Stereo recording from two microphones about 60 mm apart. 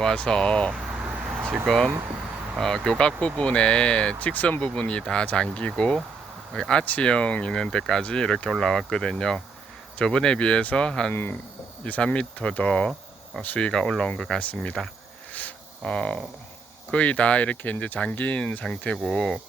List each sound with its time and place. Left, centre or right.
0.0 s speech: centre
1.4 s a sound: right
1.6 s speech: centre
11.1 s speech: left
11.9 s speech: centre
15.3 s a sound: left
15.9 s speech: centre